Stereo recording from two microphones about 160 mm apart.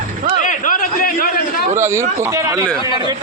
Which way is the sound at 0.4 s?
55° left (ahead or behind).